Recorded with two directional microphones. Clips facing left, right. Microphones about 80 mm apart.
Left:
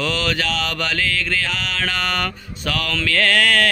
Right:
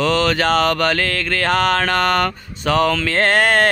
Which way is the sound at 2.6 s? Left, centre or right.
Right.